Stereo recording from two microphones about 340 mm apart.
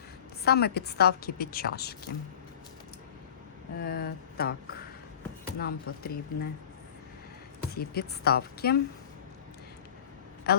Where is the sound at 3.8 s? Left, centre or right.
Left.